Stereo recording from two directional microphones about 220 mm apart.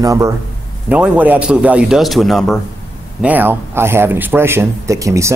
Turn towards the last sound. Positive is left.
turn(degrees=-15)  # may be behind; listen again after turning